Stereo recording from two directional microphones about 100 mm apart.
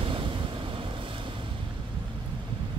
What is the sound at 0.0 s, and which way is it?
Wind noise, 60° right (ahead or behind).